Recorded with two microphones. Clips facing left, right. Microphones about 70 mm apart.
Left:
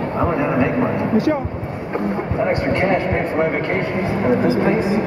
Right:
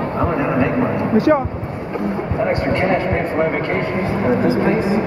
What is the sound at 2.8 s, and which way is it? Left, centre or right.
Speech, centre.